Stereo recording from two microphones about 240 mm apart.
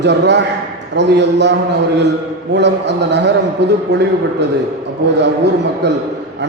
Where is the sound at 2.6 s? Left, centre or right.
Right.